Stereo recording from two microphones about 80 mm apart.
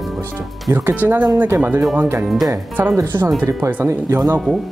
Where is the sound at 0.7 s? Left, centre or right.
Right.